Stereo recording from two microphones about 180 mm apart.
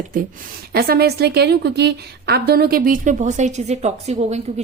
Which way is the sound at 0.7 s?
60° right (ahead or behind).